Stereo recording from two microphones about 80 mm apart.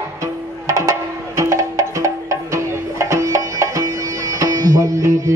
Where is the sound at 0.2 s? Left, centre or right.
Right.